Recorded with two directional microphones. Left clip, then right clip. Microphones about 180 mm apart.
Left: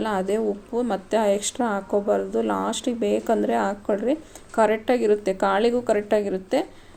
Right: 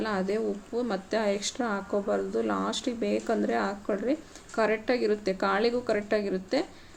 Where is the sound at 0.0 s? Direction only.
15° left (ahead or behind).